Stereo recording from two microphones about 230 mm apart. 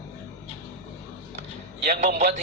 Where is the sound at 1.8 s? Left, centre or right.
Right.